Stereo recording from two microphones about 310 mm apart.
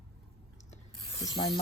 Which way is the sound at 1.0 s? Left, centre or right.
Centre.